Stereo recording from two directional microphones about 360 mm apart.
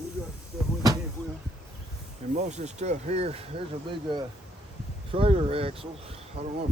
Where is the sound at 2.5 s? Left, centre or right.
Centre.